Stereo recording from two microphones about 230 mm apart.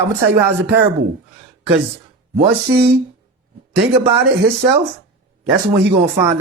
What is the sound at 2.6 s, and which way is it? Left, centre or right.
Speech, right.